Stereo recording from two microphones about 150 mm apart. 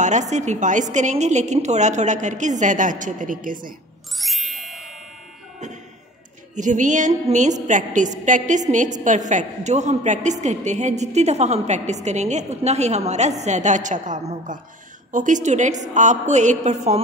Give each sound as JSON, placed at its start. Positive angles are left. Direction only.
{"t": 0.0, "sound": "a woman's voice", "side_deg": -50}
{"t": 4.2, "sound": "music", "side_deg": 0}
{"t": 6.5, "sound": "a woman's voice", "side_deg": -55}